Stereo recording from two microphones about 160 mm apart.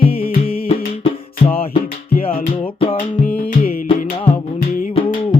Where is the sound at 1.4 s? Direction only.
55° left (ahead or behind).